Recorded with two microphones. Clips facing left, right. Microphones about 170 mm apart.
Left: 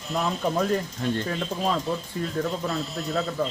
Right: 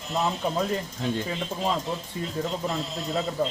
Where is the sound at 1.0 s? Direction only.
10° right (ahead or behind).